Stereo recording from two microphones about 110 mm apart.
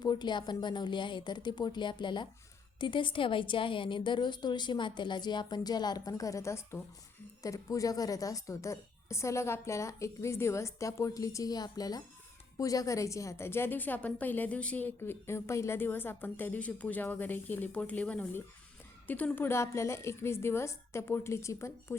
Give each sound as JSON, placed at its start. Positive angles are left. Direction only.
{"t": 0.0, "sound": "a woman's voice", "side_deg": 40}